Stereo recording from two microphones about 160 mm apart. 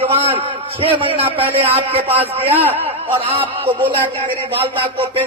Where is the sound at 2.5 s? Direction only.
10° right (ahead or behind).